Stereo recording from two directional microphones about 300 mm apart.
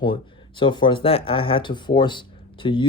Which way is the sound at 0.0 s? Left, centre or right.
Centre.